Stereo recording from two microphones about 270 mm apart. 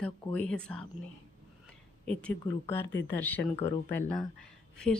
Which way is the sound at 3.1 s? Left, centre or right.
Centre.